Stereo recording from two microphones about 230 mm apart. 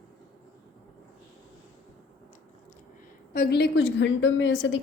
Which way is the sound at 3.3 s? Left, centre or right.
Left.